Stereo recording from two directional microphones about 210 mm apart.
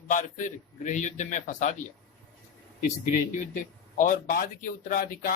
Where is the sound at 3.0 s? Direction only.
40° left (ahead or behind).